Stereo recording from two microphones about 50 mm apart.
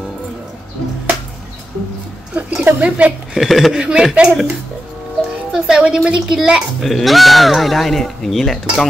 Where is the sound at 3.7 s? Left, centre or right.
Centre.